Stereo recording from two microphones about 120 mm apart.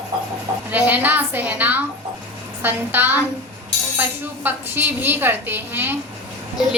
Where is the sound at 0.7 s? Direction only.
15° right (ahead or behind).